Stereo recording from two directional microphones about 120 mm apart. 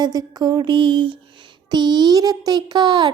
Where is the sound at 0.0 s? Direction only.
35° right (ahead or behind).